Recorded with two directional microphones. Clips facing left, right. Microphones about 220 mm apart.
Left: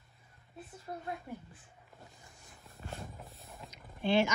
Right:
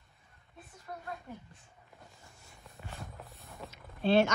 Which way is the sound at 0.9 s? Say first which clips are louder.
Left 2 dB; 30° left (ahead or behind).